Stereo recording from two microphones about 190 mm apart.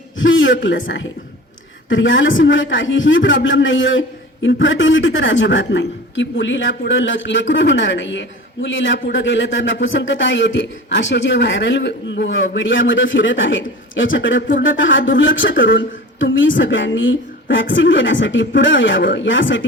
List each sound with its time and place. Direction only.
0.2 s a man's voice: 90° left
4.4 s a man's voice: 75° left (ahead or behind)